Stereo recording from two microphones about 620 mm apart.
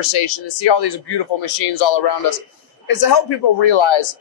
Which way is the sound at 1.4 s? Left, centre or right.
Left.